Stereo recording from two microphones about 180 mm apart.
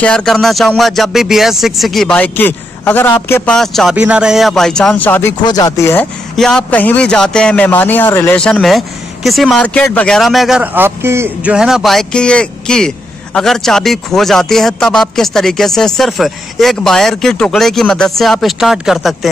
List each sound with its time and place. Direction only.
0.0 s a man's voice: 5° left (ahead or behind)
5.4 s speech: 20° left (ahead or behind)
6.3 s a man's voice: centre (ahead or behind)